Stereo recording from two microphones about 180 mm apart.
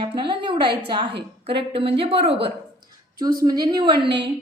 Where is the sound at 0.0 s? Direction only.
25° right (ahead or behind).